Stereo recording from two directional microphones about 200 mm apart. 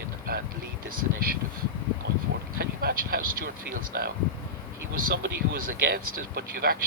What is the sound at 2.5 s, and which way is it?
Speech, 50° right (ahead or behind).